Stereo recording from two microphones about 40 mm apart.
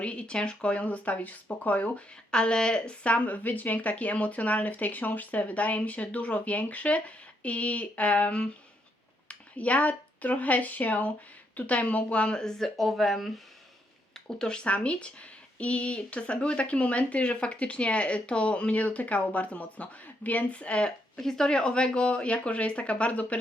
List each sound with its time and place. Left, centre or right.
0.0 s speech: left
2.3 s speech: left
12.3 s speech: centre
12.6 s speech: centre
14.3 s speech: centre
21.2 s speech: centre; by 23.4 s left